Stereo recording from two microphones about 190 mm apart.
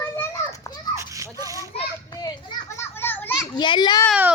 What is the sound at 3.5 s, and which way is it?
Speech, 25° left (ahead or behind).